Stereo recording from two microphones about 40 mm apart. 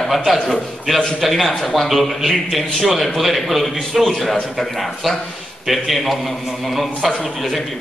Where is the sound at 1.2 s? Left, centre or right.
Centre.